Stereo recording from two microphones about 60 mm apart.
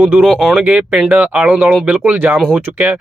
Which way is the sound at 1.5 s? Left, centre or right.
Right.